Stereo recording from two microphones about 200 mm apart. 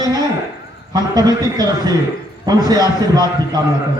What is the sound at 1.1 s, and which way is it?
A man's voice, 20° right (ahead or behind).